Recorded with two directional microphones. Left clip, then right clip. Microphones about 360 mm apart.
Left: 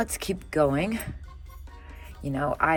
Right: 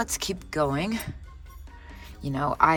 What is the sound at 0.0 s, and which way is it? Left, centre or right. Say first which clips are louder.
Speech: even; centre.